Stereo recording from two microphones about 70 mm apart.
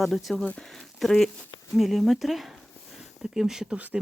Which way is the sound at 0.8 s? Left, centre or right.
Centre.